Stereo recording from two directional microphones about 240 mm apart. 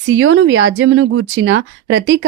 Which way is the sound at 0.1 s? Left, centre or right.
Right.